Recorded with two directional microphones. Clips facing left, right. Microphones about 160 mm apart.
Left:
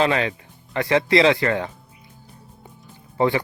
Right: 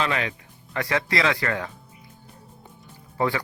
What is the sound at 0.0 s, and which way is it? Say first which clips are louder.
Speech: left 6 dB; 35° left (ahead or behind).